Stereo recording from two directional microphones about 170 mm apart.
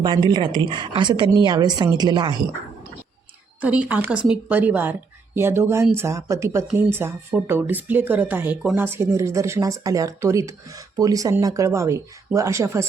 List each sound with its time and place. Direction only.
0.0 s speech: 25° right (ahead or behind)
3.6 s speech: 10° right (ahead or behind)